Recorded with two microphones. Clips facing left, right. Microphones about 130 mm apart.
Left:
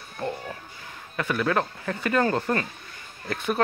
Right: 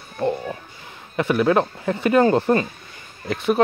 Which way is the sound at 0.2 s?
20° right (ahead or behind).